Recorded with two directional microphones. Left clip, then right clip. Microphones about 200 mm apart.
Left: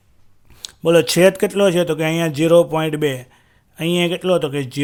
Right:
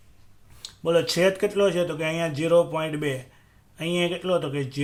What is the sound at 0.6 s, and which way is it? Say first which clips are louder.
Speech: left 8 dB; 50° left (ahead or behind).